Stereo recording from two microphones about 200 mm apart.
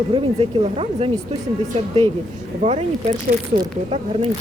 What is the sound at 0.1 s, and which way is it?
Speech, 30° right (ahead or behind).